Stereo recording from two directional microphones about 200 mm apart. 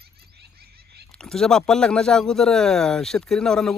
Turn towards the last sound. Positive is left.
turn(degrees=5)  # may be behind; listen again after turning